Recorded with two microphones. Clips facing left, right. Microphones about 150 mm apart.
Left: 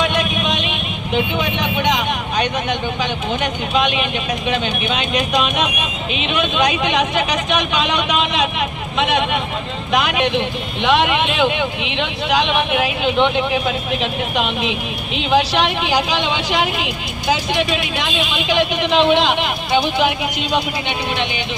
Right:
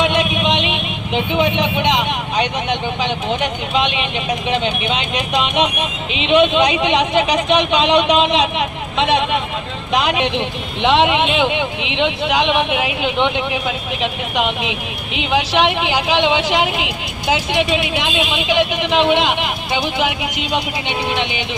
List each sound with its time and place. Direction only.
0.0 s vehicle: 25° right (ahead or behind)
2.4 s speech: 25° right (ahead or behind)
9.9 s speech: 30° right (ahead or behind)